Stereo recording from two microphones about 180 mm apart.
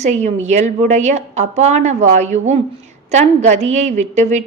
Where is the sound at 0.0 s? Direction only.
40° right (ahead or behind).